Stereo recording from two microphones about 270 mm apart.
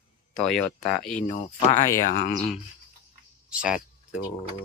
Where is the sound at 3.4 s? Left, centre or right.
Centre.